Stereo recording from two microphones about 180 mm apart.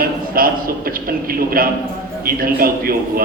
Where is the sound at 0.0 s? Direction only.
55° right (ahead or behind).